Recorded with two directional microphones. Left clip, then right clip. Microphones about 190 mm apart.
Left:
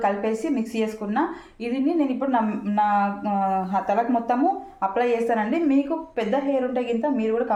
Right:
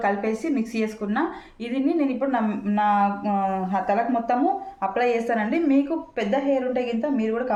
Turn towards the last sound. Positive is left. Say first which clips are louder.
# left 2 dB
turn(degrees=-15)  # may be behind; listen again after turning